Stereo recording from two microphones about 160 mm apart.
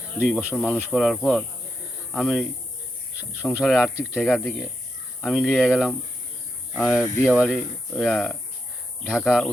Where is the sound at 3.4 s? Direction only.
5° right (ahead or behind).